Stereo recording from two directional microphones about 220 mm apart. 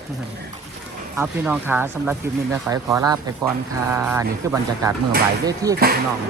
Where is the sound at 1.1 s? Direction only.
10° right (ahead or behind).